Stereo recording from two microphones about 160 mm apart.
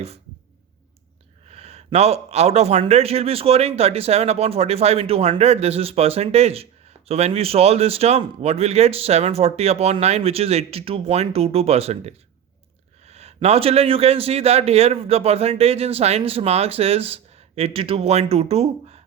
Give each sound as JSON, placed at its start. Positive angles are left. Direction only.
{"t": 1.5, "sound": "a man's voice", "side_deg": -40}